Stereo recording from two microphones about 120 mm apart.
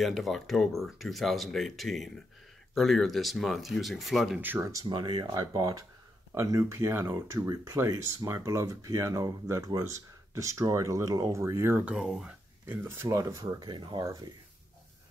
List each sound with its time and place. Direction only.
0.0 s speech: centre (ahead or behind)
4.4 s speech: 15° right (ahead or behind)
4.8 s speech: 40° right (ahead or behind)
5.3 s speech: 30° right (ahead or behind); by 12.4 s 5° right (ahead or behind)
12.6 s speech: 20° right (ahead or behind); by 14.0 s 40° right (ahead or behind)
14.0 s speech: 25° right (ahead or behind)